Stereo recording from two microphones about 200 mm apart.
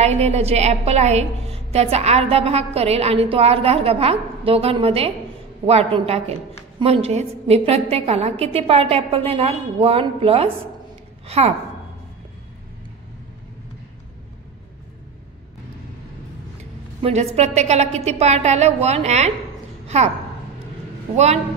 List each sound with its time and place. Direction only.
0.0 s a woman's voice: 30° right (ahead or behind)
17.0 s a woman's voice: 30° right (ahead or behind)